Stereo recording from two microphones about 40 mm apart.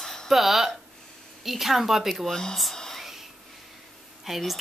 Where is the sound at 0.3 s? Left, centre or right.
Centre.